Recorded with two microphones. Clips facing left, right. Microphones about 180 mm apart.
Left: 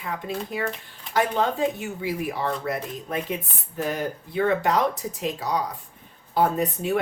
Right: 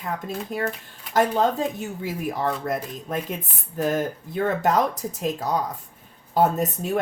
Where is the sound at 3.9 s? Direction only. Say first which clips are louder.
Right 3 dB; 45° right (ahead or behind).